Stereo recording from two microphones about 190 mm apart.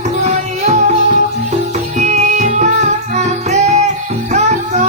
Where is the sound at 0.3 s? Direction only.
35° right (ahead or behind).